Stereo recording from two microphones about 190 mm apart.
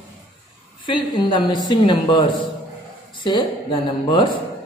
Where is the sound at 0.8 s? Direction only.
25° left (ahead or behind).